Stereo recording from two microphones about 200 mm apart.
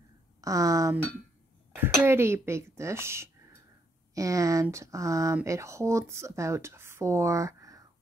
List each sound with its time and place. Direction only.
0.4 s speech: 15° right (ahead or behind)